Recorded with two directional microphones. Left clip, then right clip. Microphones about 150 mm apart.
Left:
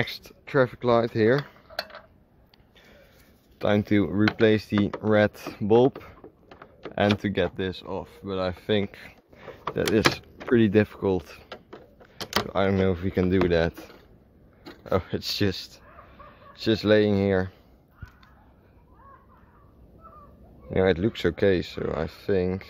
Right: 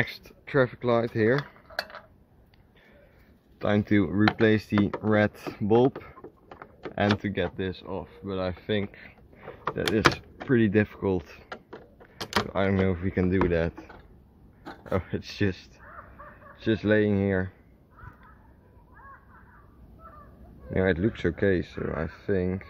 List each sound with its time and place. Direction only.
0.0 s speech: 15° left (ahead or behind)
1.7 s a sound: 15° right (ahead or behind)
3.5 s speech: 15° left (ahead or behind)
7.2 s speech: 30° left (ahead or behind)
8.8 s a sound: 40° left (ahead or behind)
9.8 s speech: 35° left (ahead or behind); by 11.4 s 15° left (ahead or behind)
12.4 s speech: 15° left (ahead or behind)
20.7 s speech: 15° left (ahead or behind)